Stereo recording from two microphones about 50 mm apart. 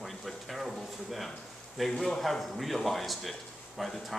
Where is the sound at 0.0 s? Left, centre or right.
Centre.